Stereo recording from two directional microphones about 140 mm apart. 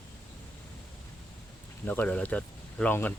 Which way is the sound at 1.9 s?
10° left (ahead or behind).